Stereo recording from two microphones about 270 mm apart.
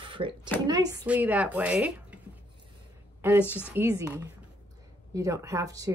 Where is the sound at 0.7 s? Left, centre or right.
Centre.